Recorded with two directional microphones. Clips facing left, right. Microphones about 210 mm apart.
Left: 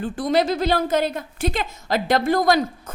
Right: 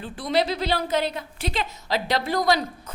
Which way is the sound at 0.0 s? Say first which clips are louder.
Left 4 dB; 45° left (ahead or behind).